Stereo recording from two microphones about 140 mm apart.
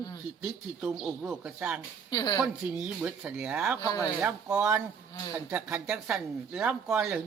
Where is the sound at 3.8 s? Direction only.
30° left (ahead or behind).